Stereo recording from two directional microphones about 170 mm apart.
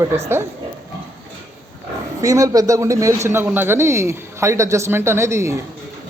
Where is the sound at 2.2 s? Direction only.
20° right (ahead or behind).